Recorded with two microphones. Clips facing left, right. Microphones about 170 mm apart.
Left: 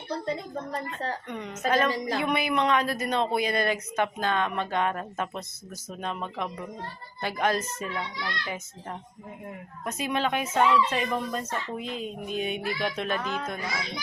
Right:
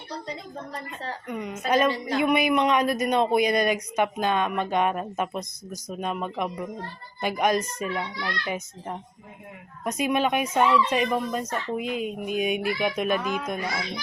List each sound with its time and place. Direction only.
1.3 s speech: 10° right (ahead or behind)
9.8 s speech: 15° right (ahead or behind)